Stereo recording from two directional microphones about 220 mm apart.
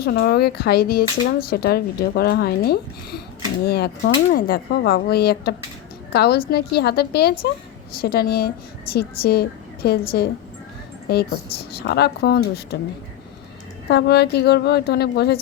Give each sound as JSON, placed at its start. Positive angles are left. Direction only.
{"t": 0.0, "sound": "speech", "side_deg": 45}
{"t": 11.1, "sound": "speech", "side_deg": 45}
{"t": 13.8, "sound": "speech", "side_deg": 50}